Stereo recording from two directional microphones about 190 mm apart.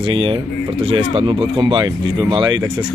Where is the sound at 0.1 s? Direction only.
25° right (ahead or behind).